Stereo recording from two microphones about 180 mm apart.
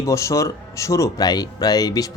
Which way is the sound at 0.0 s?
15° left (ahead or behind).